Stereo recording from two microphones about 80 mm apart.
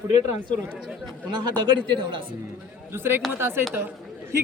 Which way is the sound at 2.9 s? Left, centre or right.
Right.